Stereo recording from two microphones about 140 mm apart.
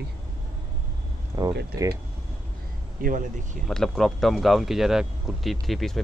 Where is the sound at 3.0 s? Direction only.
70° right (ahead or behind).